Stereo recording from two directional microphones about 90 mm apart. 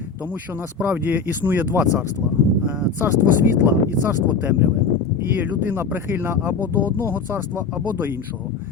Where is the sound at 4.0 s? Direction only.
25° right (ahead or behind).